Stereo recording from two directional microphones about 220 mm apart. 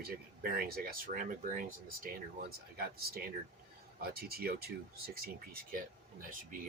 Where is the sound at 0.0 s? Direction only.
45° right (ahead or behind).